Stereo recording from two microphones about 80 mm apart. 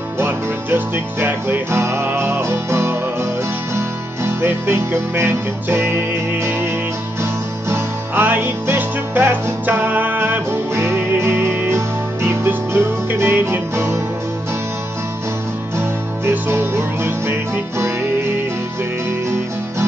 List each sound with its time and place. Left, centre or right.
0.2 s music: right
7.7 s music: right
15.8 s music: right